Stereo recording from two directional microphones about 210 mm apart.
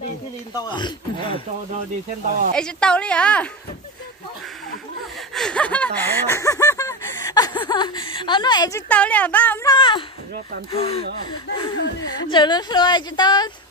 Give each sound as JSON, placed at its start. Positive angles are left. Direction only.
{"t": 0.7, "sound": "a woman's voice", "side_deg": 20}
{"t": 2.5, "sound": "a woman's voice", "side_deg": 5}
{"t": 5.3, "sound": "a woman's voice", "side_deg": 5}
{"t": 12.0, "sound": "a woman's voice", "side_deg": 20}